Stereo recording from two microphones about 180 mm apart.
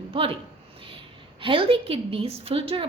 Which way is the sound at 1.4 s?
30° right (ahead or behind).